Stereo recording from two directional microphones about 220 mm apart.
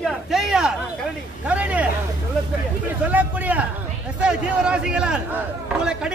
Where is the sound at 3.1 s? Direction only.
5° right (ahead or behind).